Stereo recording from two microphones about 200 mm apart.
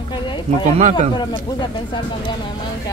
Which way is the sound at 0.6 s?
35° right (ahead or behind).